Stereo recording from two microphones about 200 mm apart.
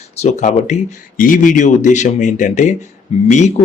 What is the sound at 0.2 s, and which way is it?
Speech, 35° left (ahead or behind).